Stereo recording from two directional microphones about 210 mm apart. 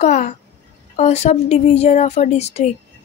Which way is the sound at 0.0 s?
35° left (ahead or behind).